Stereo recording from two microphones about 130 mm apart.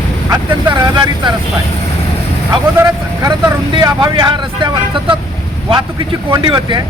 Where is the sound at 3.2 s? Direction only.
35° right (ahead or behind).